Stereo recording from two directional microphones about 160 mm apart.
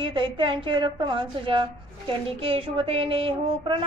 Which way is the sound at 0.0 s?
30° right (ahead or behind).